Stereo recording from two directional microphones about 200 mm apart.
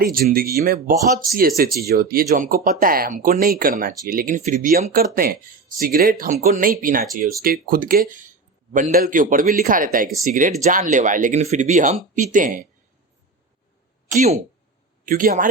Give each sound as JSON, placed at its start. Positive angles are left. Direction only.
{"t": 0.0, "sound": "speech", "side_deg": -45}
{"t": 14.1, "sound": "speech", "side_deg": -35}